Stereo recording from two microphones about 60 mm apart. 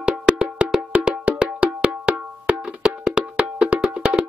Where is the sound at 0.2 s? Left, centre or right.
Centre.